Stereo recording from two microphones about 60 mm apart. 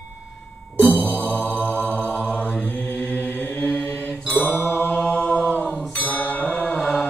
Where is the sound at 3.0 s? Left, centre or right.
Left.